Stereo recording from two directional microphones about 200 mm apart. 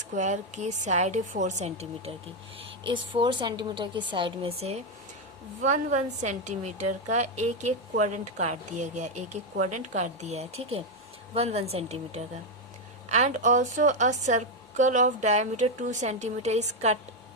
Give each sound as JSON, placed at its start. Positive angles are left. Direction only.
{"t": 0.0, "sound": "a woman's voice", "side_deg": -35}